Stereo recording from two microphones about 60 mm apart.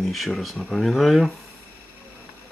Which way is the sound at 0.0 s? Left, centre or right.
Centre.